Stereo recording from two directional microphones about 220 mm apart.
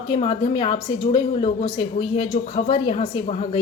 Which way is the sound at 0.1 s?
20° left (ahead or behind).